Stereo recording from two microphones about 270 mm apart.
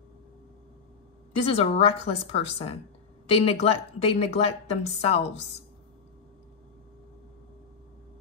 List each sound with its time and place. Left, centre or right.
1.3 s a woman's voice: left